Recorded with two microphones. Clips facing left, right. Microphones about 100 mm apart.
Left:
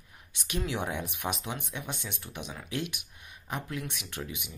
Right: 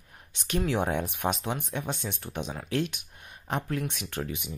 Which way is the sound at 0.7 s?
50° right (ahead or behind).